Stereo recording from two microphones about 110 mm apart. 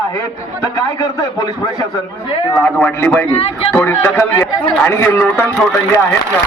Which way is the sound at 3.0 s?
20° left (ahead or behind).